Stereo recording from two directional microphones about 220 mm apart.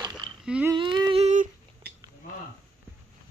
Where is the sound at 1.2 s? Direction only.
35° right (ahead or behind).